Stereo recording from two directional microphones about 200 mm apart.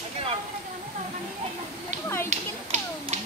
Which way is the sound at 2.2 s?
35° right (ahead or behind).